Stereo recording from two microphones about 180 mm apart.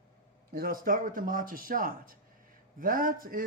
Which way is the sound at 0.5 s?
55° right (ahead or behind).